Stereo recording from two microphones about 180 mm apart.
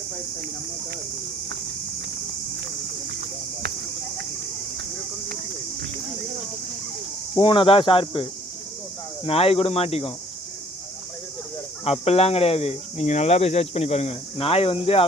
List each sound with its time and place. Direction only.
7.3 s speech: 30° left (ahead or behind)
11.9 s speech: 35° left (ahead or behind)